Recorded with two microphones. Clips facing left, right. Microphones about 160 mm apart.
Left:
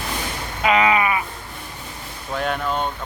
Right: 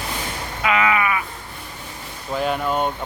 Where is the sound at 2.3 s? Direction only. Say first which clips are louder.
Right 2 dB; 5° right (ahead or behind).